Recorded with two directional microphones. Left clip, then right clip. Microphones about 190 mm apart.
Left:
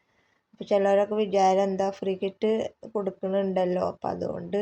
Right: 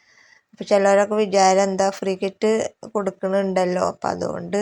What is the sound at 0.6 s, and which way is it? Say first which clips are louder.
A woman's voice: right 6 dB; 20° right (ahead or behind).